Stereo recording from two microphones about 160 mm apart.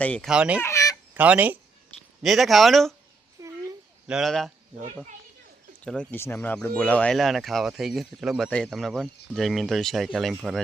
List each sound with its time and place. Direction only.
0.0 s speech: 10° left (ahead or behind)
0.3 s speech: 5° right (ahead or behind)
0.6 s fowl: 20° left (ahead or behind)
1.1 s speech: 10° right (ahead or behind)
3.4 s a sound: 20° right (ahead or behind)
4.0 s speech: centre (ahead or behind)
5.8 s speech: 5° left (ahead or behind)